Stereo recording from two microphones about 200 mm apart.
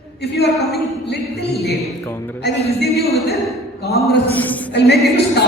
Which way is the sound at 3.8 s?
55° left (ahead or behind).